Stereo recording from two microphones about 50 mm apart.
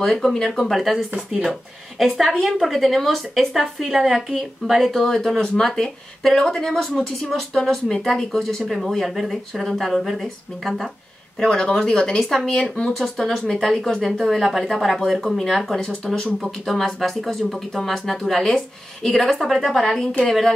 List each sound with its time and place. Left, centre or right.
0.0 s a woman's voice: centre
2.0 s a woman's voice: centre
11.3 s a woman's voice: centre
12.5 s a woman's voice: centre
12.9 s a woman's voice: centre
15.3 s a woman's voice: centre